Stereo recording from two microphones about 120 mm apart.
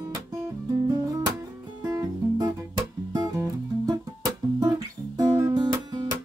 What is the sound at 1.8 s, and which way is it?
Music, 30° right (ahead or behind).